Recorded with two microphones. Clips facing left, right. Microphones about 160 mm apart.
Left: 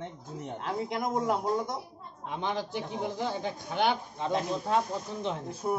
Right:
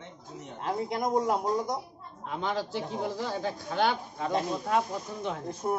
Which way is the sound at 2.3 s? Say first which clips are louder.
Right 1 dB; 20° left (ahead or behind).